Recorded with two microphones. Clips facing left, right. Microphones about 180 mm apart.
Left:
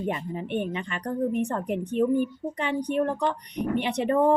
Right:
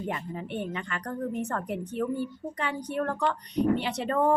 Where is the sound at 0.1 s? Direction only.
20° left (ahead or behind).